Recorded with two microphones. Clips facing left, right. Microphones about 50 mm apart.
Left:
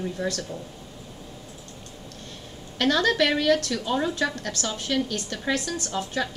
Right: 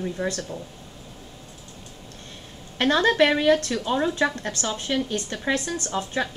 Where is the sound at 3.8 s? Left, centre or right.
Centre.